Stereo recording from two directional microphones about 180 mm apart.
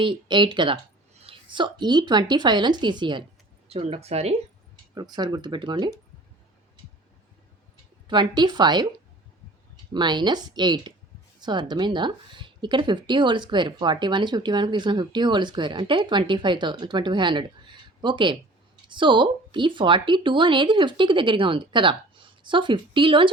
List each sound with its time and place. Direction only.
0.0 s speech: 25° right (ahead or behind)
4.9 s speech: 25° right (ahead or behind)
8.0 s speech: 25° right (ahead or behind)
9.9 s speech: 25° right (ahead or behind)